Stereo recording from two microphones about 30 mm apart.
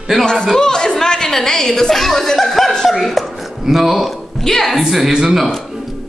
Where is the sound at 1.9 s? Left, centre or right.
Centre.